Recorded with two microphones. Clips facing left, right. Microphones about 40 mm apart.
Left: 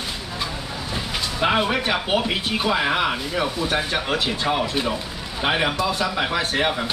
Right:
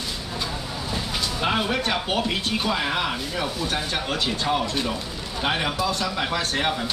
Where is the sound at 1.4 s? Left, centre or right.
Centre.